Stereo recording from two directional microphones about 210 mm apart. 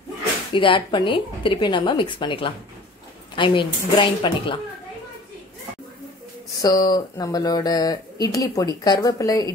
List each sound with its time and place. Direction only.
0.6 s a woman's voice: 25° left (ahead or behind)
6.6 s speech: 20° left (ahead or behind)